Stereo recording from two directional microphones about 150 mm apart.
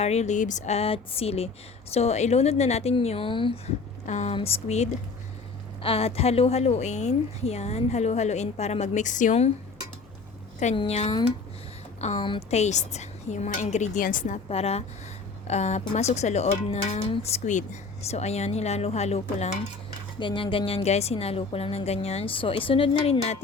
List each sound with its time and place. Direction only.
0.0 s a woman's voice: 45° left (ahead or behind)
4.0 s a woman's voice: 50° left (ahead or behind)
4.4 s a woman's voice: 40° left (ahead or behind)
10.8 s a woman's voice: 45° left (ahead or behind)
12.1 s a woman's voice: 35° left (ahead or behind)
12.5 s a woman's voice: 50° left (ahead or behind); by 14.3 s 65° left (ahead or behind)
14.5 s a woman's voice: 45° left (ahead or behind)
20.1 s a woman's voice: 35° left (ahead or behind)